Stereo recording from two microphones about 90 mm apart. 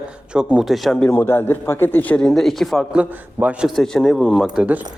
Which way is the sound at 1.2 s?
25° left (ahead or behind).